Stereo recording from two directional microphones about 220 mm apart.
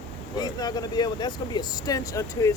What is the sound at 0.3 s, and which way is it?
Speech, 20° left (ahead or behind).